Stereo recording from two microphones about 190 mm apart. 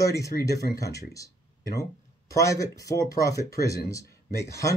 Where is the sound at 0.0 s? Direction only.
15° left (ahead or behind).